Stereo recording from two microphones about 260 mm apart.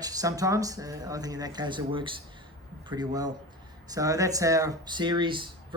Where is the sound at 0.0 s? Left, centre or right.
Centre.